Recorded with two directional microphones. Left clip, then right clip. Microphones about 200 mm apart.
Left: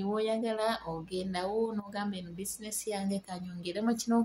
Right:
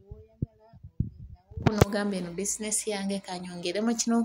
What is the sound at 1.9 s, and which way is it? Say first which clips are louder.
Speech: right 7 dB; 20° right (ahead or behind).